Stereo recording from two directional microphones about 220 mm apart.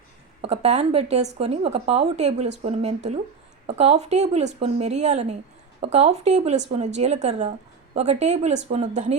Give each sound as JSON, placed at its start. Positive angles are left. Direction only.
{"t": 0.4, "sound": "speech", "side_deg": -30}